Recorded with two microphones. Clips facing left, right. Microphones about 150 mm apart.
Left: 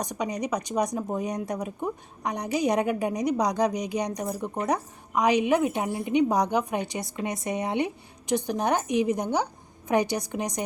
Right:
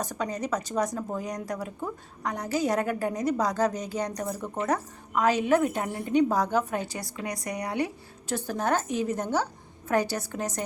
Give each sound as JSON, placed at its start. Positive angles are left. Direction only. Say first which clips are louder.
{"t": 0.0, "sound": "a woman's voice", "louder": "left 1 dB", "side_deg": 15}